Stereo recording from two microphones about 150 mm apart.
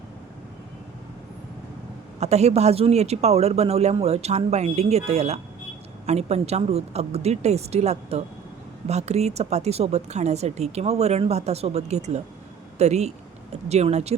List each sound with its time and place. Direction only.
2.2 s speech: 45° right (ahead or behind)